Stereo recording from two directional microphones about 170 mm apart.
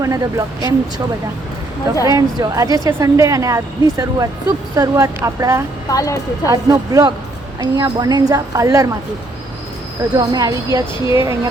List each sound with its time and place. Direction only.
0.0 s a woman's voice: 20° right (ahead or behind)
2.0 s a woman's voice: 20° right (ahead or behind)
5.9 s a woman's voice: 20° left (ahead or behind)
6.5 s a woman's voice: 20° right (ahead or behind)
10.2 s a woman's voice: 20° right (ahead or behind)